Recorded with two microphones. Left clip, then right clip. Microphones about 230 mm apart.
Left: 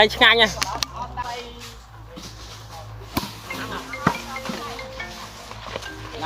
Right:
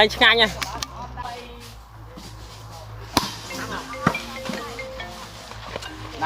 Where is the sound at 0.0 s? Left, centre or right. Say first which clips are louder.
Left 1 dB; centre.